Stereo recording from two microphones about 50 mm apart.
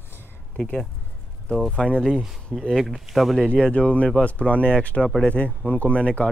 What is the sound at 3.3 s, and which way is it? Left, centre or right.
Speech, centre.